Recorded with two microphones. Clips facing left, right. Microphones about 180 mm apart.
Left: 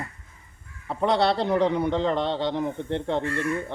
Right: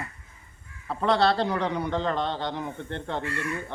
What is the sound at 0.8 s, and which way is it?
A man's voice, 20° left (ahead or behind).